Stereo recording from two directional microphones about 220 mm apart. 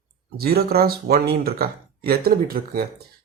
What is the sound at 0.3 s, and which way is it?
Speech, 45° right (ahead or behind).